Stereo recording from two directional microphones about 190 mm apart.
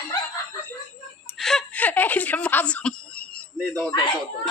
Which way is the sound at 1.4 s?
Centre (ahead or behind).